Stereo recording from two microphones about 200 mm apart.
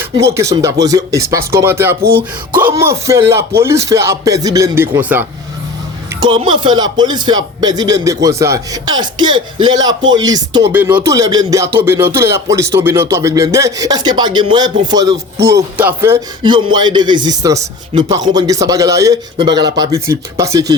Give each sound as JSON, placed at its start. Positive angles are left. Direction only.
{"t": 0.0, "sound": "speech", "side_deg": -15}
{"t": 6.1, "sound": "speech", "side_deg": -25}
{"t": 16.4, "sound": "speech", "side_deg": -25}